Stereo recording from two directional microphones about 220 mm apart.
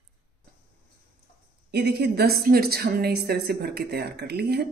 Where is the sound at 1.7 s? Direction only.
50° right (ahead or behind).